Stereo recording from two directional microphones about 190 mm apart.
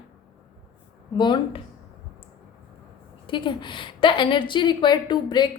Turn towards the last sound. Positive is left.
turn(degrees=25)  # may be behind; listen again after turning